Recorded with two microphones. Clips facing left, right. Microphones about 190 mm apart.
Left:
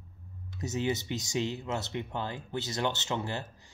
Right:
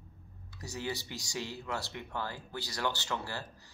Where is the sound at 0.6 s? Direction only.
20° left (ahead or behind).